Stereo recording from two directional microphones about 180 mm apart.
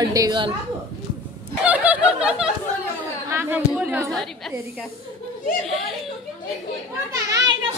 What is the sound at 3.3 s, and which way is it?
Speech, 10° right (ahead or behind).